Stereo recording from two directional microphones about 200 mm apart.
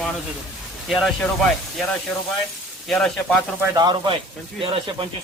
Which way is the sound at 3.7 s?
20° right (ahead or behind).